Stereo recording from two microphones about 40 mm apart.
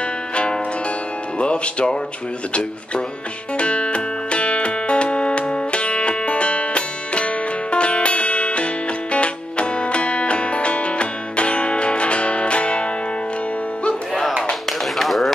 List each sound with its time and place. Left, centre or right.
0.3 s music: left
1.4 s speech: left
3.5 s music: left
14.7 s a sound: centre